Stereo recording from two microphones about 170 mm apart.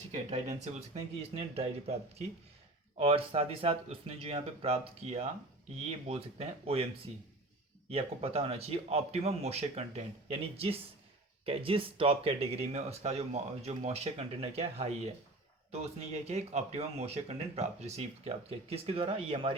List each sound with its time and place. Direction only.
0.1 s speech: 40° right (ahead or behind)
7.9 s speech: 35° right (ahead or behind)